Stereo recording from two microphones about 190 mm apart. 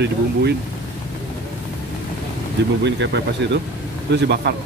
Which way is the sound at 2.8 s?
65° right (ahead or behind).